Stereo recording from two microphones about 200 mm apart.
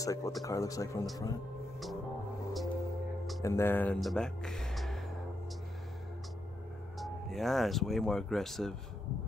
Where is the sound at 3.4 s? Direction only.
10° left (ahead or behind).